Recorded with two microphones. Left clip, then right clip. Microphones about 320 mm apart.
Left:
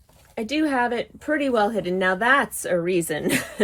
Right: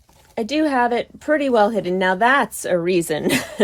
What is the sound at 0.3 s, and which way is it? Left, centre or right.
Speech, right.